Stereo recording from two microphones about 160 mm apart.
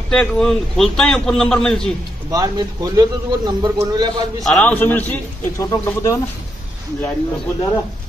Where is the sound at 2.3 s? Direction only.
25° right (ahead or behind).